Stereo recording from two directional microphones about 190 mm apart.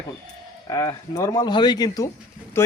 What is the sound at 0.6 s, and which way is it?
Speech, 20° left (ahead or behind).